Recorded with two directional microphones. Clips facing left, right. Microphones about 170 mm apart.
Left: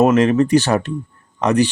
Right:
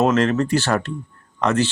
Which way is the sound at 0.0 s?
15° left (ahead or behind).